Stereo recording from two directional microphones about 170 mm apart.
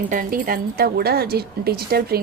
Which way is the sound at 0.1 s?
50° right (ahead or behind).